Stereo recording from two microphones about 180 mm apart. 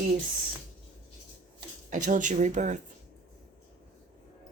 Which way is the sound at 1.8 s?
45° right (ahead or behind).